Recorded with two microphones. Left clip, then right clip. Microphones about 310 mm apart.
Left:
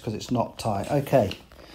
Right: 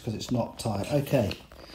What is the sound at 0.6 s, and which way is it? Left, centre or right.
Speech, centre.